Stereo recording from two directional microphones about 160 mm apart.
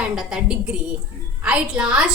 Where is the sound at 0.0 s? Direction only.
5° right (ahead or behind).